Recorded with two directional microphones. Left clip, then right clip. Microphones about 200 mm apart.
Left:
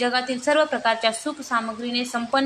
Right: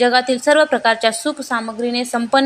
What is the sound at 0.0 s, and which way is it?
A woman's voice, 25° right (ahead or behind).